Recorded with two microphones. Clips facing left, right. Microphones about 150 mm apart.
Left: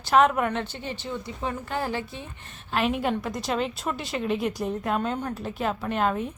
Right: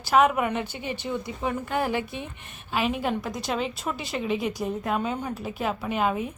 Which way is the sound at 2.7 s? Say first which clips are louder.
Left 1 dB; centre (ahead or behind).